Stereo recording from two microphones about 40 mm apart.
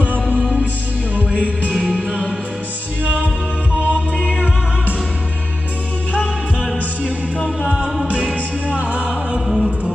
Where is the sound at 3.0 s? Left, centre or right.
Right.